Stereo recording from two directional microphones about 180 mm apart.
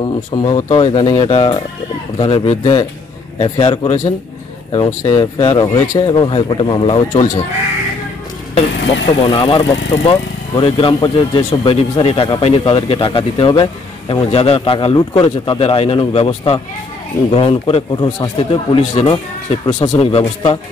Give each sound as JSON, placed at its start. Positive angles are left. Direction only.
{"t": 0.0, "sound": "speech", "side_deg": 25}
{"t": 9.3, "sound": "speech", "side_deg": 30}